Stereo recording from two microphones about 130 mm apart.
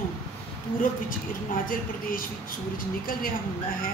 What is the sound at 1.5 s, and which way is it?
A woman's voice, 90° left.